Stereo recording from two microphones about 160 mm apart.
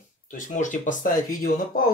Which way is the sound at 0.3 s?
50° left (ahead or behind).